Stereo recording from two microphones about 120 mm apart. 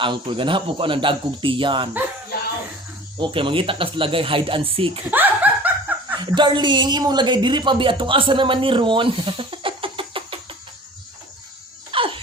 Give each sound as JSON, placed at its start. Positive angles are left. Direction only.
{"t": 0.0, "sound": "speech", "side_deg": -40}
{"t": 3.2, "sound": "speech", "side_deg": -45}
{"t": 5.1, "sound": "laughter", "side_deg": -15}
{"t": 6.1, "sound": "speech", "side_deg": -40}
{"t": 11.9, "sound": "a sound", "side_deg": -45}